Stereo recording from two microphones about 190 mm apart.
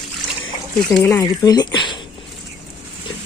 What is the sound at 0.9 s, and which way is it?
Speech, 5° left (ahead or behind).